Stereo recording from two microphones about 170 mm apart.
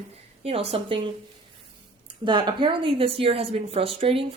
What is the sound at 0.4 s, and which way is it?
A woman's voice, 35° right (ahead or behind).